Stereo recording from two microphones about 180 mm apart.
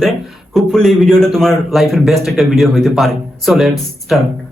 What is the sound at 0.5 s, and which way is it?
A man's voice, centre (ahead or behind).